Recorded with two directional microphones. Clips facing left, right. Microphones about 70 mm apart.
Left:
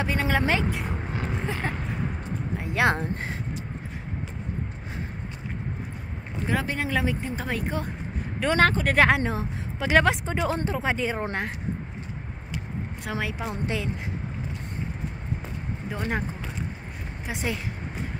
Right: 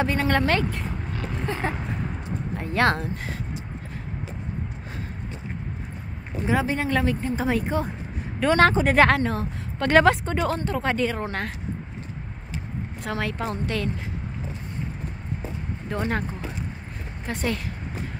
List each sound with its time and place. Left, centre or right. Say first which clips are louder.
0.0 s speech: right 3 dB; centre
0.4 s oink: right 2 dB; centre
1.5 s a sound: right 2 dB; centre
2.9 s speech: even; left
6.4 s speech: right 4 dB; centre
9.1 s a woman's voice: right 1 dB; centre
13.0 s a woman's voice: right 3 dB; centre
13.7 s speech: right 2 dB; centre
15.9 s speech: right 5 dB; centre
17.3 s a woman's voice: right 3 dB; centre